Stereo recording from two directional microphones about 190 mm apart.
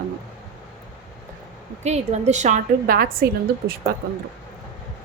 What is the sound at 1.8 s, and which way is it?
A woman's voice, 35° right (ahead or behind).